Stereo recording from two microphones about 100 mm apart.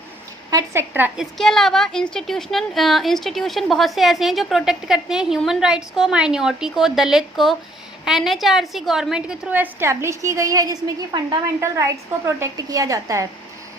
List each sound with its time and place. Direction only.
0.5 s speech: 25° right (ahead or behind)
1.1 s a woman's voice: centre (ahead or behind)
9.5 s a woman's voice: 20° right (ahead or behind)
9.9 s a woman's voice: 30° right (ahead or behind)